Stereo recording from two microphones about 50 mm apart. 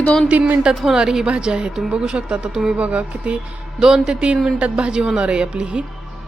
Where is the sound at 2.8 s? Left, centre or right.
Right.